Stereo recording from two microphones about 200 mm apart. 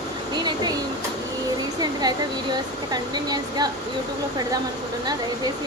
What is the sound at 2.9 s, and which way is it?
Speech, 20° right (ahead or behind).